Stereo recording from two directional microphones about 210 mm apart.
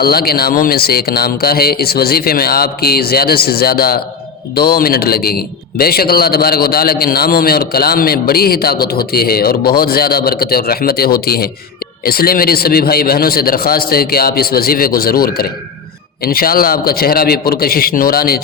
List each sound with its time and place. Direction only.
0.0 s a man's voice: 45° left (ahead or behind)